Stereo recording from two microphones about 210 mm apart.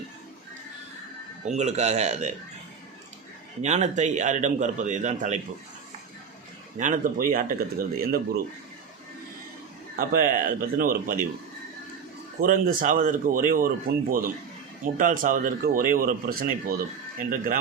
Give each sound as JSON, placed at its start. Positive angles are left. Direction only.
{"t": 1.5, "sound": "a man's voice", "side_deg": -30}
{"t": 3.6, "sound": "a man's voice", "side_deg": -35}
{"t": 6.7, "sound": "a man's voice", "side_deg": -35}
{"t": 9.9, "sound": "a man's voice", "side_deg": -40}
{"t": 12.4, "sound": "a man's voice", "side_deg": -40}